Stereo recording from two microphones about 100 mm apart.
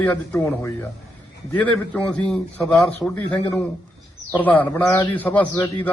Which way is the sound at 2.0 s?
10° left (ahead or behind).